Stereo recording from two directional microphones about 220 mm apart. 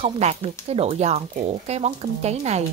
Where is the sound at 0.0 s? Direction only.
30° right (ahead or behind).